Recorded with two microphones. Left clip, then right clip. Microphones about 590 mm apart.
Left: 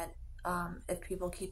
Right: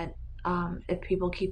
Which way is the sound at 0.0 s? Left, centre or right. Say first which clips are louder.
Right 5 dB; left.